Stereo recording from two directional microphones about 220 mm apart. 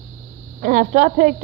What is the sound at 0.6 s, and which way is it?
Speech, 35° right (ahead or behind).